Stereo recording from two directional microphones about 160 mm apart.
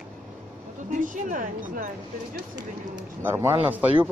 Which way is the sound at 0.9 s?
55° right (ahead or behind).